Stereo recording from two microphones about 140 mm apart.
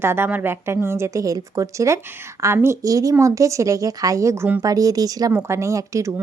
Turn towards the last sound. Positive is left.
turn(degrees=-20)  # may be behind; listen again after turning